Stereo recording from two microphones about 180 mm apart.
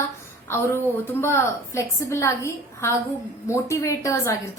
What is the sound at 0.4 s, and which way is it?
A woman's voice, 15° left (ahead or behind).